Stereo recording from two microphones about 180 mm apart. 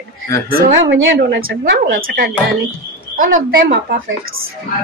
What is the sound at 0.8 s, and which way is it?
Speech, 80° right.